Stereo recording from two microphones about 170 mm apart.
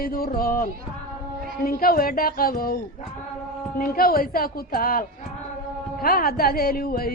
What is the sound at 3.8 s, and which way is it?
Music, 60° left (ahead or behind).